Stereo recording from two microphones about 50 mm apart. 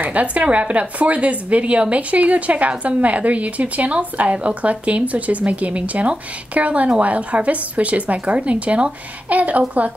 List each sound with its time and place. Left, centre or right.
0.0 s speech: right